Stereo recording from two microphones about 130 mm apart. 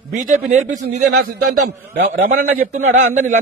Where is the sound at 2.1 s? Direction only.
90° right; by 3.3 s 75° right (ahead or behind).